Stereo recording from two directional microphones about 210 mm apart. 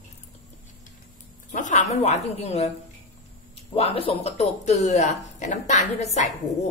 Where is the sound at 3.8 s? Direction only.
30° left (ahead or behind).